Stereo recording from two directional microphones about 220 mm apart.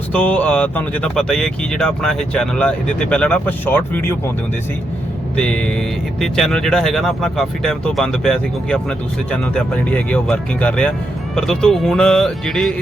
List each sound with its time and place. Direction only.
0.1 s speech: 5° left (ahead or behind)
5.4 s speech: 5° left (ahead or behind)
9.9 s speech: 5° left (ahead or behind)